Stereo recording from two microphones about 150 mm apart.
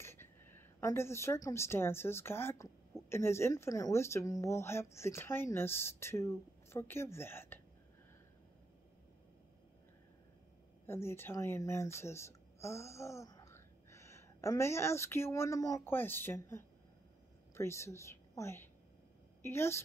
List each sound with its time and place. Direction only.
0.0 s a woman's voice: 15° left (ahead or behind)
10.9 s a woman's voice: 15° left (ahead or behind)